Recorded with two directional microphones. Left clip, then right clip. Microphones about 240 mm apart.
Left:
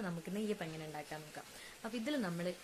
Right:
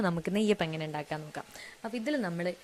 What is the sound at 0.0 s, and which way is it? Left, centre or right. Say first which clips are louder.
Speech: right 12 dB; right.